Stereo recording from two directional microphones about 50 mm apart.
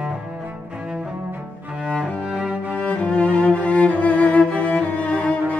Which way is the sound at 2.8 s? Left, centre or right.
Left.